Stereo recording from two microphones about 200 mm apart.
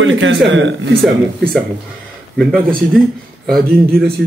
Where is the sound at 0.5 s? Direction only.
65° right (ahead or behind).